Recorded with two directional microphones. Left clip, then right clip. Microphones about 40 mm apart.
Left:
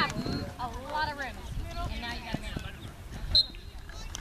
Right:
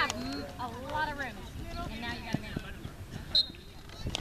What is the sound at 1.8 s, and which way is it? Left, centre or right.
Vehicle, centre.